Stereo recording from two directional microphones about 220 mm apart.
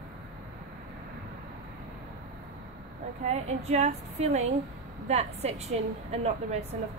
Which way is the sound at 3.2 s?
30° right (ahead or behind).